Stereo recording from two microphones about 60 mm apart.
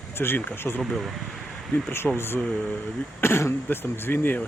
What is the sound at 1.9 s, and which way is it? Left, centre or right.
Speech, left.